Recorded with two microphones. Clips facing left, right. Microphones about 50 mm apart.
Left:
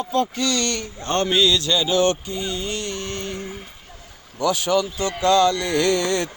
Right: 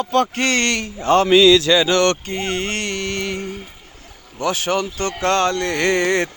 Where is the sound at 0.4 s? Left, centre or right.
Right.